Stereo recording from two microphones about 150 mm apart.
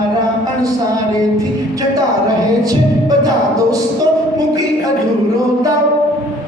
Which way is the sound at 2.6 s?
25° right (ahead or behind).